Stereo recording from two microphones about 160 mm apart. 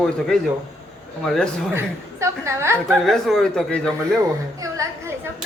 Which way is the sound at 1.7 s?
15° right (ahead or behind).